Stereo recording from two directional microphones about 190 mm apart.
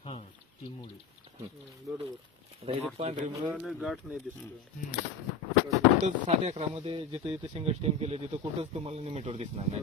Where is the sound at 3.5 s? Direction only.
Centre (ahead or behind).